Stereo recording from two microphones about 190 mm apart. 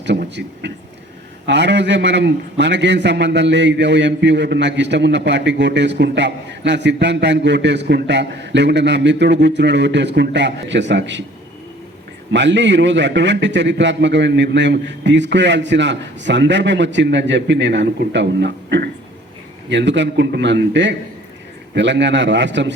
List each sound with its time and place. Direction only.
0.0 s a man's voice: 65° right (ahead or behind)
12.3 s a man's voice: 70° right (ahead or behind)